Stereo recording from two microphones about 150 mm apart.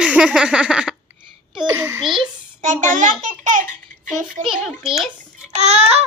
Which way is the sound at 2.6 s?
55° right (ahead or behind).